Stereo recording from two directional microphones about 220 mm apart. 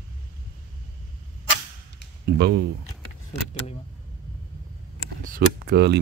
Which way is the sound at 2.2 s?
50° right (ahead or behind).